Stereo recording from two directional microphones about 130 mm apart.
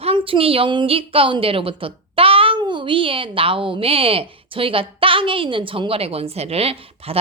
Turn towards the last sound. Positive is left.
turn(degrees=-50)  # may be behind; listen again after turning